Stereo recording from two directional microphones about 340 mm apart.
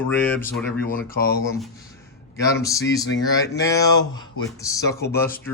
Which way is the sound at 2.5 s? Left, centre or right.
Centre.